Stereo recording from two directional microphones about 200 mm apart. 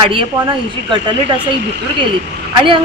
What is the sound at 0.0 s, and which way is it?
Speech, 25° right (ahead or behind).